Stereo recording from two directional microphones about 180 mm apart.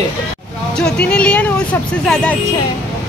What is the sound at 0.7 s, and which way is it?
Speech, 5° left (ahead or behind).